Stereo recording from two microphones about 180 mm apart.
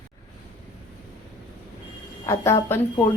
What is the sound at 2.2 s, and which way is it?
Speech, 15° left (ahead or behind).